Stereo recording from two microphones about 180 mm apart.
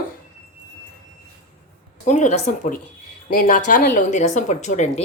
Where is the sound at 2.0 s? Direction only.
45° left (ahead or behind).